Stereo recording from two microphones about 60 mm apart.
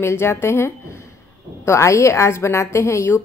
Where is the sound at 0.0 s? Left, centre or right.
Left.